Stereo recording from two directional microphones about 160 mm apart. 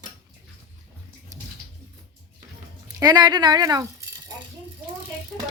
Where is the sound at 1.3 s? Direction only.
20° right (ahead or behind).